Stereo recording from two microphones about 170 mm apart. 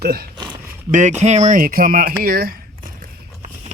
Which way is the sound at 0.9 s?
45° right (ahead or behind).